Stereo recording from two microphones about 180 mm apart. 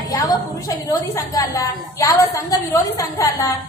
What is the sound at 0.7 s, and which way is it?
A woman's voice, 20° left (ahead or behind).